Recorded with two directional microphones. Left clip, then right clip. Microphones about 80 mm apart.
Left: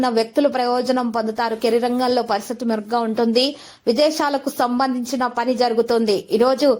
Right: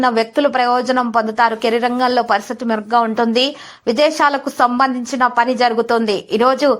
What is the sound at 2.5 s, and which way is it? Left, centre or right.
A woman's voice, left.